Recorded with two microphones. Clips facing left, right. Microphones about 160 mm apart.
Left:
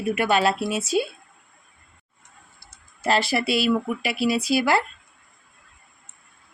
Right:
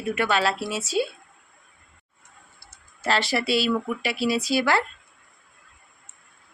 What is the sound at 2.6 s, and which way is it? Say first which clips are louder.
Speech: left 3 dB; 15° left (ahead or behind).